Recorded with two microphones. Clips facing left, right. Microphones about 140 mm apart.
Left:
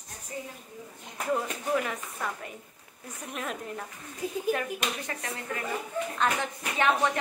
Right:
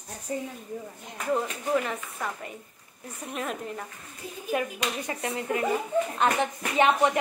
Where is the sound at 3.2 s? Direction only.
Centre (ahead or behind).